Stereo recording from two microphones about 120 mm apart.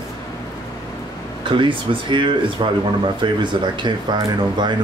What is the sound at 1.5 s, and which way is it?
Speech, 45° right (ahead or behind).